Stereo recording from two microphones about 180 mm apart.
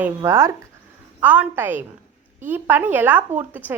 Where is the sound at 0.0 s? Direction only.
15° right (ahead or behind).